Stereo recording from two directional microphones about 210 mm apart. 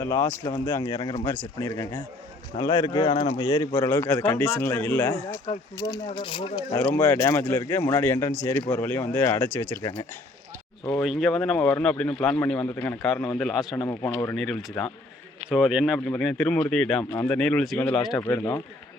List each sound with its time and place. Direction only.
0.0 s a man's voice: 15° left (ahead or behind)
6.9 s a man's voice: 10° left (ahead or behind)
11.0 s speech: centre (ahead or behind)
13.8 s a man's voice: 10° left (ahead or behind)